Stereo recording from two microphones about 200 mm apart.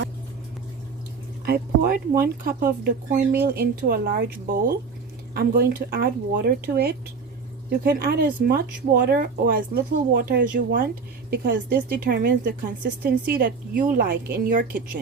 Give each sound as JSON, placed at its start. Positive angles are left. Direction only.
{"t": 1.5, "sound": "a woman's voice", "side_deg": -45}